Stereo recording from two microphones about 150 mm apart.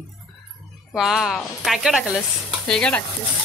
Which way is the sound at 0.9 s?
5° right (ahead or behind).